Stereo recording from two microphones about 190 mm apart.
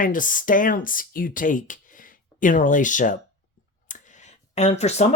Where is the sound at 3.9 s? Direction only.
40° left (ahead or behind).